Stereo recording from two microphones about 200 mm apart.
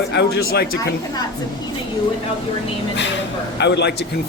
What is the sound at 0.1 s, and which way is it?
Speech, 55° left (ahead or behind).